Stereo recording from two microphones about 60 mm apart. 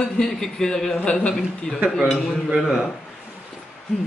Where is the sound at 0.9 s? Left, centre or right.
Left.